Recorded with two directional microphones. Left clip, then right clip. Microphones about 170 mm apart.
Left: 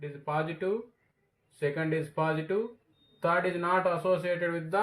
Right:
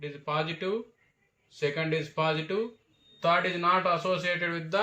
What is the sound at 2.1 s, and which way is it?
Speech, 50° left (ahead or behind).